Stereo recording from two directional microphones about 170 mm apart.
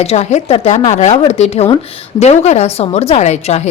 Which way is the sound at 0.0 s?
40° left (ahead or behind).